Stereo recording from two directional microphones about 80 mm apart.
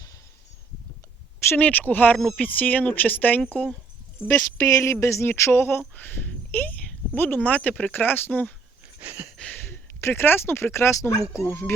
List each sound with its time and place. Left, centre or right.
1.5 s speech: left
2.1 s speech: centre
2.4 s speech: left
4.3 s speech: left; by 8.5 s centre
9.0 s a sound: right
9.4 s a sound: left
10.0 s speech: left